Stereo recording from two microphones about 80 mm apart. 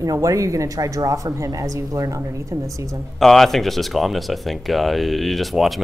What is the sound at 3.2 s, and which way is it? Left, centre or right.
Speech, centre.